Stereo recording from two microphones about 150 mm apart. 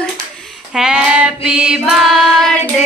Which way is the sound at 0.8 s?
5° right (ahead or behind).